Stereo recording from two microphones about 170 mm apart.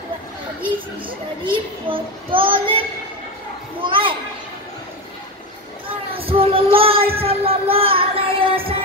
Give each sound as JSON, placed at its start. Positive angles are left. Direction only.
{"t": 0.7, "sound": "a child's voice", "side_deg": -30}
{"t": 3.8, "sound": "a child's voice", "side_deg": -30}
{"t": 5.9, "sound": "a sound", "side_deg": -30}
{"t": 7.2, "sound": "music", "side_deg": -35}